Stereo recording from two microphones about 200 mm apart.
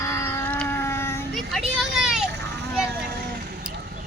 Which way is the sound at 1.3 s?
Centre (ahead or behind).